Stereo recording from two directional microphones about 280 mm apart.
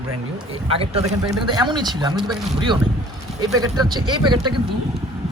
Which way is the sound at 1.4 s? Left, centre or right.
Centre.